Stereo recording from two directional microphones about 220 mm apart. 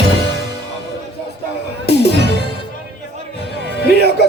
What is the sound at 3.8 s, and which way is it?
Speech, 50° left (ahead or behind).